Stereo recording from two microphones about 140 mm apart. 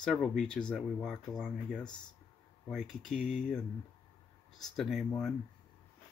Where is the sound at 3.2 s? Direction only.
60° left (ahead or behind).